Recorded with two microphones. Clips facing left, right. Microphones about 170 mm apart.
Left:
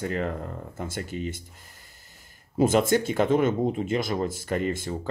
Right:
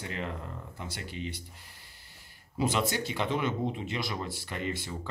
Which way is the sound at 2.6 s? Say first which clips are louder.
Left 9 dB; 50° left (ahead or behind).